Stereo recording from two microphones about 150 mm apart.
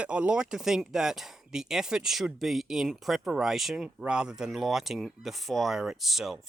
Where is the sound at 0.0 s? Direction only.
10° right (ahead or behind).